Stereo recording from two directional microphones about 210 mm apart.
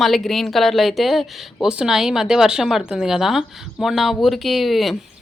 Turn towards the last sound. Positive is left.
turn(degrees=0)  # may be behind; listen again after turning